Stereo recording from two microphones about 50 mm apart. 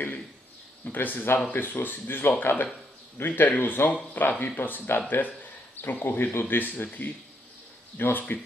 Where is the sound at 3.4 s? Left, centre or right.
Left.